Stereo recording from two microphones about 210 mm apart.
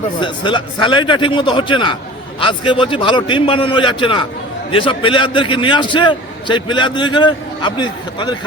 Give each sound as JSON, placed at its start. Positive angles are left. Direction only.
{"t": 0.2, "sound": "a man's voice", "side_deg": 20}